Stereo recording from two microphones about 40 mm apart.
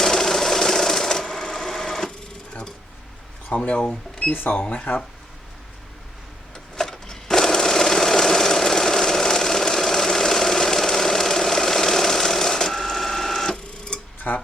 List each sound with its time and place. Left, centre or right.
0.0 s sewing machine: centre
3.5 s speech: left
3.8 s speech: centre
4.4 s speech: left
6.7 s sewing machine: centre
14.3 s music: left